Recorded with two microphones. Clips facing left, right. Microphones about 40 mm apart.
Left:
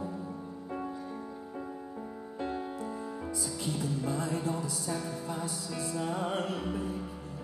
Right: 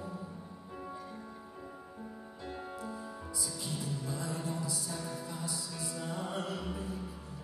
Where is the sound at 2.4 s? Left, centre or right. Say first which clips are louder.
Left 7 dB; left.